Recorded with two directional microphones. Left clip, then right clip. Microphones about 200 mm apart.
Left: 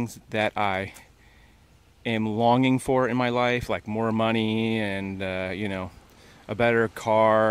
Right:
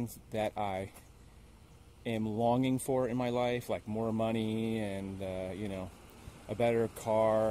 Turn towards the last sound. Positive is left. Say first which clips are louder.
# left 9 dB
turn(degrees=30)  # may be behind; listen again after turning